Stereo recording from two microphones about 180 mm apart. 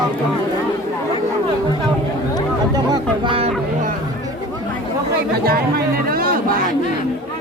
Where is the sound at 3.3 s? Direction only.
30° right (ahead or behind).